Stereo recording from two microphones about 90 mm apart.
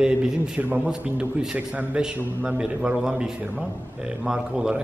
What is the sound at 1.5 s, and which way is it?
A man's voice, 20° right (ahead or behind).